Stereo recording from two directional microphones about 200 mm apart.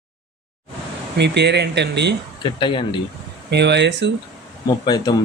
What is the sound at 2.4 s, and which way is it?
Speech, 25° left (ahead or behind).